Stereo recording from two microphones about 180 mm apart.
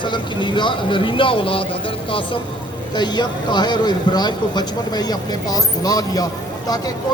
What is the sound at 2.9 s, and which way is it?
Speech, 25° left (ahead or behind).